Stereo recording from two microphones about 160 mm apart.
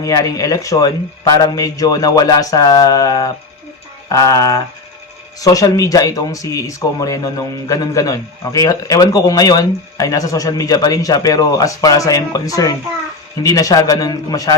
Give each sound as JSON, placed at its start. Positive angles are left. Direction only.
{"t": 0.0, "sound": "speech", "side_deg": 20}